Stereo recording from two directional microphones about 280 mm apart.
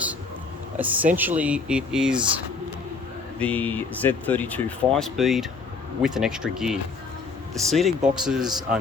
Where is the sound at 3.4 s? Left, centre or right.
Centre.